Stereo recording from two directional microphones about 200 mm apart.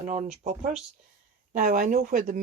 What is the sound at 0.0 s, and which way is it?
Speech, 35° right (ahead or behind).